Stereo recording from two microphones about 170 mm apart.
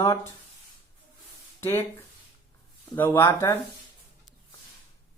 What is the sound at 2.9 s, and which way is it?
Speech, 10° left (ahead or behind).